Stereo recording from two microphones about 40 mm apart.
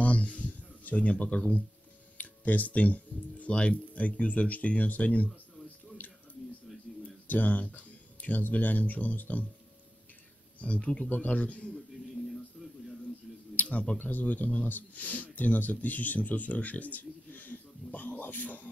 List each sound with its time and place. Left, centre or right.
0.0 s a sound: left
2.1 s speech: left
7.2 s speech: left
10.6 s speech: left
13.6 s tick-tock: left
13.9 s speech: left